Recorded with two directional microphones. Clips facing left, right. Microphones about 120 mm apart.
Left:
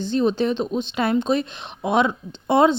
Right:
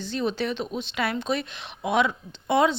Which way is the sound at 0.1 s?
35° left (ahead or behind).